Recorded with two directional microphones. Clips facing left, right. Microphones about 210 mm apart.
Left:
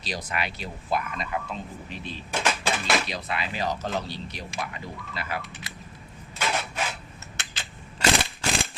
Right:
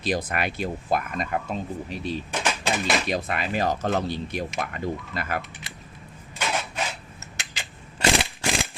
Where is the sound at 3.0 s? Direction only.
50° right (ahead or behind).